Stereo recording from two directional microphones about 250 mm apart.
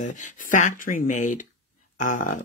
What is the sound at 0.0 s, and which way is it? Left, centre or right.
Speech, left.